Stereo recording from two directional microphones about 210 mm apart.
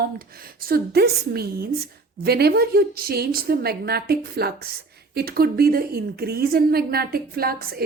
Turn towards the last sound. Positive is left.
turn(degrees=-45)  # may be behind; listen again after turning